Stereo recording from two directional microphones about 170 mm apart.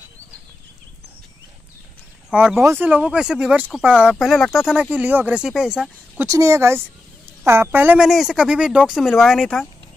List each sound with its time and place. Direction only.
2.3 s speech: 10° right (ahead or behind)
6.2 s speech: 20° right (ahead or behind); by 9.7 s 5° left (ahead or behind)